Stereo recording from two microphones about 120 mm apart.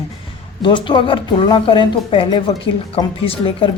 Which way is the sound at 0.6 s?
45° left (ahead or behind).